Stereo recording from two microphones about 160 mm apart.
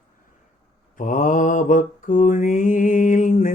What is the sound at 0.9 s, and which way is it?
Mantra, 55° left (ahead or behind).